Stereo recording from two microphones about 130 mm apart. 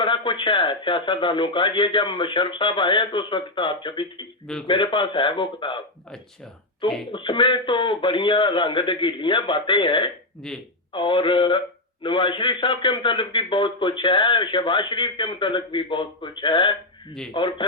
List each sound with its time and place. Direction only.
0.0 s a man's voice: 40° left (ahead or behind)
7.1 s a man's voice: 40° left (ahead or behind)
10.4 s speech: 5° left (ahead or behind)
10.9 s a man's voice: 40° left (ahead or behind)